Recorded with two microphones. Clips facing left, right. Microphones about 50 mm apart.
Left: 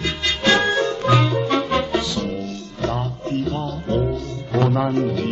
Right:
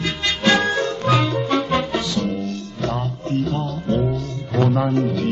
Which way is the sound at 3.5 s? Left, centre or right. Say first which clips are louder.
Right 1 dB; centre.